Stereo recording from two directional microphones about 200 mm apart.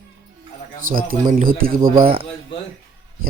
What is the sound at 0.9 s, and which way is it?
Speech, 45° right (ahead or behind).